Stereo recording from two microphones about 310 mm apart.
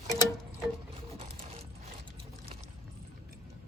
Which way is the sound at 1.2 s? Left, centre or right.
Centre.